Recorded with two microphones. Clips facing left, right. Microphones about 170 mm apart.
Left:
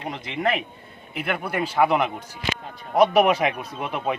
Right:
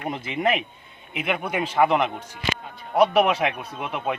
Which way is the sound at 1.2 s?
Centre (ahead or behind).